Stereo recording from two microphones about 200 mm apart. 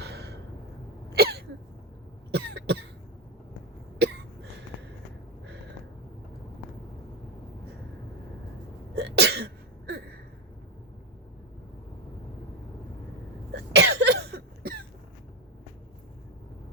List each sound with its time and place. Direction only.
1.1 s cough: 50° right (ahead or behind)
9.0 s sneeze: 55° right (ahead or behind)
13.5 s cough: 60° right (ahead or behind)